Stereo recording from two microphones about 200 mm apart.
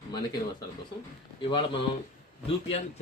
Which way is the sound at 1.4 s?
25° left (ahead or behind).